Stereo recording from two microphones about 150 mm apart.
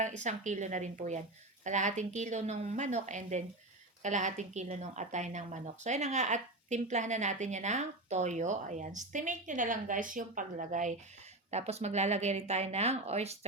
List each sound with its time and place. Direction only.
0.0 s a woman's voice: 55° right (ahead or behind)